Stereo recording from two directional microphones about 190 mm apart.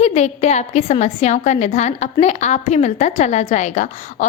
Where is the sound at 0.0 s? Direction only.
35° left (ahead or behind).